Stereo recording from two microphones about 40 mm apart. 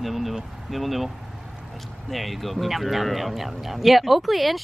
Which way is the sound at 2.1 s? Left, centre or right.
Centre.